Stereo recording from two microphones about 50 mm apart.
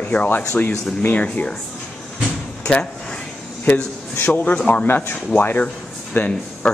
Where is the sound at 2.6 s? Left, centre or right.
Left.